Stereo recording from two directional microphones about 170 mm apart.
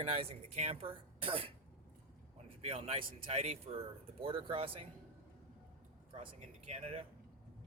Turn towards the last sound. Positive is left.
turn(degrees=-35)  # may be behind; listen again after turning